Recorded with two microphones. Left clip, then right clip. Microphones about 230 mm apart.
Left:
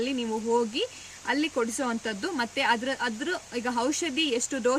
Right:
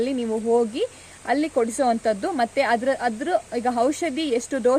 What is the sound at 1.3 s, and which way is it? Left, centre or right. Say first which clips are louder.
Speech: right 5 dB; centre.